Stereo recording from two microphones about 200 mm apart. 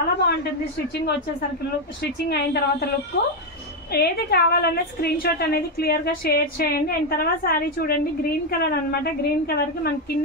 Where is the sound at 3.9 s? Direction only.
50° left (ahead or behind).